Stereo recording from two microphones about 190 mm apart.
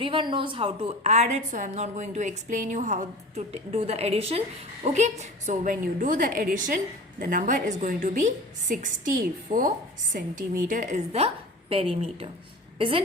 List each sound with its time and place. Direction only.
0.0 s a woman's voice: 25° right (ahead or behind)